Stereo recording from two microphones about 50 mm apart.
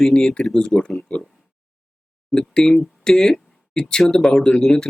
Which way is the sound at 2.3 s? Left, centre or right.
Centre.